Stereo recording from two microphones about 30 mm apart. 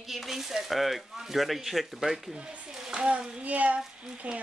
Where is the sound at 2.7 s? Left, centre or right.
Right.